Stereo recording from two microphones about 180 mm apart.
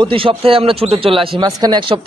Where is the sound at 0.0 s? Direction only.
30° right (ahead or behind).